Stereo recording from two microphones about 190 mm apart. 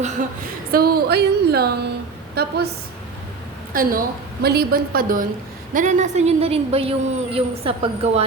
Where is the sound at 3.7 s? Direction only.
50° right (ahead or behind).